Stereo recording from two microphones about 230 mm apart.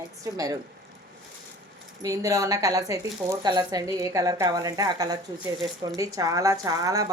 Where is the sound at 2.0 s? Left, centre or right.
Centre.